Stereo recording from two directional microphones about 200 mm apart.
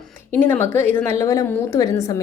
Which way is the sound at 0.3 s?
10° left (ahead or behind).